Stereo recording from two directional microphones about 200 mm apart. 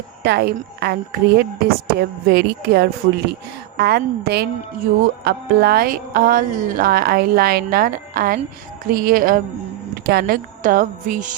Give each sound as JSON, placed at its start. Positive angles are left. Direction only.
{"t": 0.2, "sound": "a woman's voice", "side_deg": -55}